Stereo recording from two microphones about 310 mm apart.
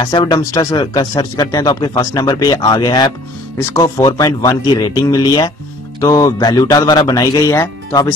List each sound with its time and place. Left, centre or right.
0.0 s speech: centre